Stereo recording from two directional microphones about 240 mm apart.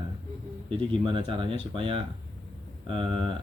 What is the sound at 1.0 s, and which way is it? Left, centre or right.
Speech, right.